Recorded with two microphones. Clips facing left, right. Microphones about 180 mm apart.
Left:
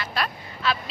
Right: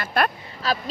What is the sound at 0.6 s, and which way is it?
Speech, 40° right (ahead or behind).